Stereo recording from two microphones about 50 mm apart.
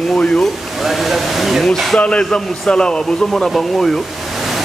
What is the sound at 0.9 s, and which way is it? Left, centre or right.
Speech, centre.